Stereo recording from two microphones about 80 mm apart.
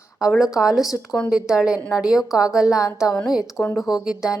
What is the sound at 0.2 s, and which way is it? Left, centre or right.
A woman's voice, centre.